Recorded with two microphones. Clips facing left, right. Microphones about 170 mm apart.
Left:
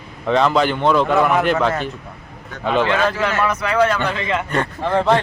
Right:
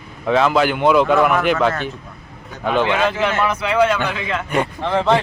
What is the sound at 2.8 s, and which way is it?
Speech, 15° right (ahead or behind).